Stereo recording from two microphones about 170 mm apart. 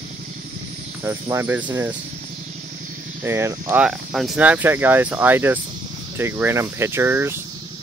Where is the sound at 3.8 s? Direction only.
Centre (ahead or behind).